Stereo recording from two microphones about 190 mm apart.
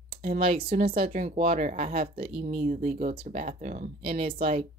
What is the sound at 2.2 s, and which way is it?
Speech, 30° right (ahead or behind).